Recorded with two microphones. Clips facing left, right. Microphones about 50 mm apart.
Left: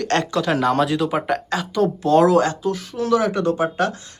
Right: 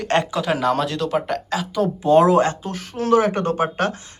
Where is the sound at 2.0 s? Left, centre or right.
Right.